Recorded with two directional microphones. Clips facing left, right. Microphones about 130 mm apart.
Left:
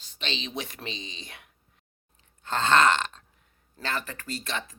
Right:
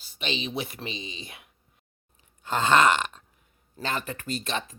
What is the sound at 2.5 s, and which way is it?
Burping, 10° right (ahead or behind).